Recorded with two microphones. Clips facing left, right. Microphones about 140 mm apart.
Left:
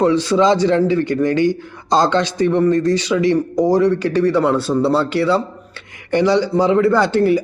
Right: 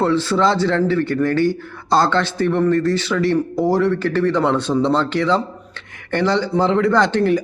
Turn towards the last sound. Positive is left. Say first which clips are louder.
# left 2 dB
turn(degrees=10)  # may be behind; listen again after turning